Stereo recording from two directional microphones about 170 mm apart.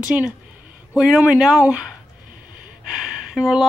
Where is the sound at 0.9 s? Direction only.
5° right (ahead or behind).